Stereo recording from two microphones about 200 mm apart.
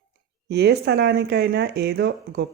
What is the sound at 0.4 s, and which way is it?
Speech, 55° right (ahead or behind).